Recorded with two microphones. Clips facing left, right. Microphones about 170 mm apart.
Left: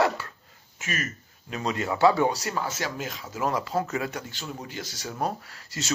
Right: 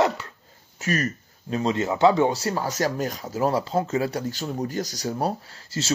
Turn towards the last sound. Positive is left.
turn(degrees=-30)  # may be behind; listen again after turning